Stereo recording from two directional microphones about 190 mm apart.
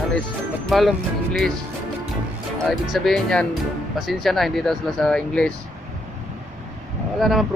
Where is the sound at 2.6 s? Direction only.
Centre (ahead or behind).